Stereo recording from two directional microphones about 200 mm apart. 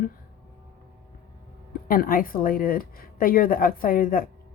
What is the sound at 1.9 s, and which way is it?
Speech, 45° left (ahead or behind).